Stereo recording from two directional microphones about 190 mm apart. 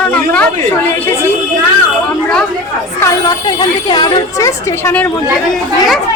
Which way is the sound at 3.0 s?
20° left (ahead or behind).